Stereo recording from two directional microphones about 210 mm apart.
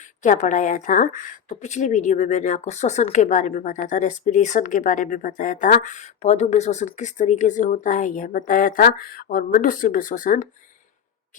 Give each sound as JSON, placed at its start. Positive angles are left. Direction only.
{"t": 0.2, "sound": "a woman's voice", "side_deg": 35}